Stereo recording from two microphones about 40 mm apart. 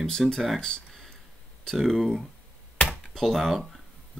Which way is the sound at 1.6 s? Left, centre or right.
Centre.